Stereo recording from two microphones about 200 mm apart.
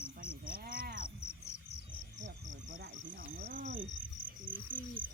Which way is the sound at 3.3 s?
50° right (ahead or behind).